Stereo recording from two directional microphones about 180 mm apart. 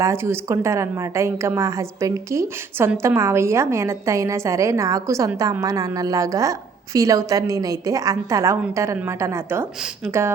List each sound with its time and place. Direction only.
0.0 s a woman's voice: 15° right (ahead or behind)